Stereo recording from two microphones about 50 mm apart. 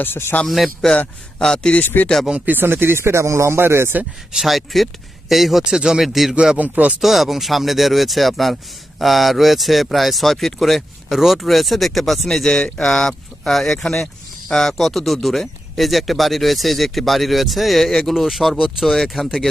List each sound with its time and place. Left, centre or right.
0.0 s speech: left
0.4 s speech: centre
1.4 s a man's voice: centre
1.8 s speech: left
2.5 s speech: right
4.3 s speech: centre
6.6 s speech: right
7.0 s speech: centre